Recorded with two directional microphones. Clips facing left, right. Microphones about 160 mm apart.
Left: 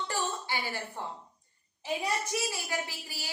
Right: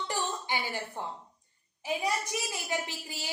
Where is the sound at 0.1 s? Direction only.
15° right (ahead or behind).